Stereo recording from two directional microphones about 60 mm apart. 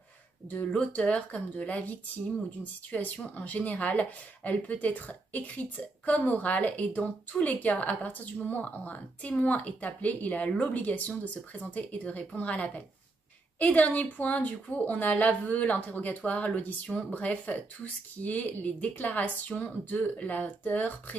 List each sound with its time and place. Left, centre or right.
0.7 s speech: centre